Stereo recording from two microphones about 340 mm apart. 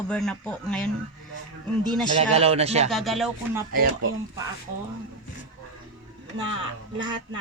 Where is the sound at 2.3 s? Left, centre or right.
Centre.